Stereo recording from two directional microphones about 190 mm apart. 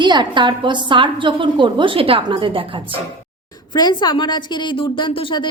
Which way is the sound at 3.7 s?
20° left (ahead or behind).